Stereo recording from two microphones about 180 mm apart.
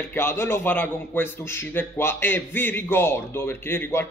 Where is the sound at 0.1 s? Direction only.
15° left (ahead or behind).